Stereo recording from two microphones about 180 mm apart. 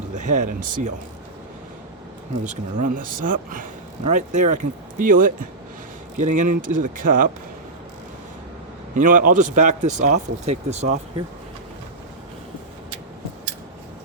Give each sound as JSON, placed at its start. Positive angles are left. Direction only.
{"t": 0.1, "sound": "speech", "side_deg": -40}
{"t": 2.4, "sound": "speech", "side_deg": -40}
{"t": 9.0, "sound": "speech", "side_deg": -45}